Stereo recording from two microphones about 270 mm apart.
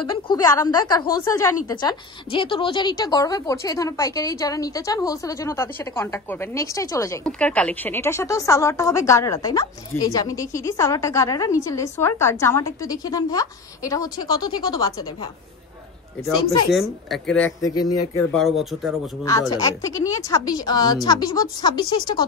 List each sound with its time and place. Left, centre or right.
0.3 s a woman's voice: centre
16.4 s a woman's voice: centre
18.3 s a woman's voice: centre
19.5 s a woman's voice: centre